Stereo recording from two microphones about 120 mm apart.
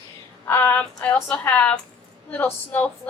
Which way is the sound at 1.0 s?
10° left (ahead or behind).